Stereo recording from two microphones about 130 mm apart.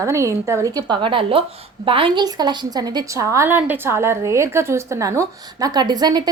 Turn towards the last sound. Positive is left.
turn(degrees=-30)  # may be behind; listen again after turning